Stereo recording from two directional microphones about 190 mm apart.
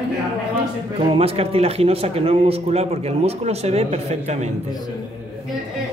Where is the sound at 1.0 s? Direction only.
30° right (ahead or behind).